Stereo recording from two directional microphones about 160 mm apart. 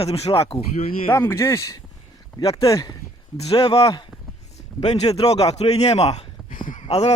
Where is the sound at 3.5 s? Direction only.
40° left (ahead or behind); by 6.8 s 55° left (ahead or behind).